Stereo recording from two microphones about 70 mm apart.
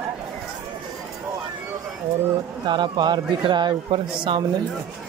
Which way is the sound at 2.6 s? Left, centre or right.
Right.